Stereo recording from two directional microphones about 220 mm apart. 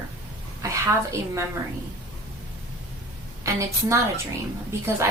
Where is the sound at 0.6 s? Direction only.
15° right (ahead or behind).